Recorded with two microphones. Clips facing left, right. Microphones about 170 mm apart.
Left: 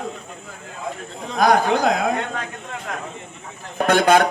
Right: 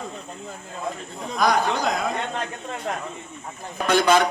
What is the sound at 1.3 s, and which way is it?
Speech, 50° left (ahead or behind).